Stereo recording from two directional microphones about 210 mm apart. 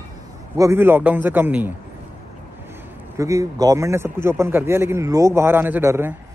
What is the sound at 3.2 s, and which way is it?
A man's voice, 15° right (ahead or behind).